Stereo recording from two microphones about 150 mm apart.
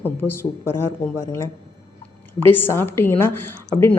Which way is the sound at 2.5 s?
15° left (ahead or behind).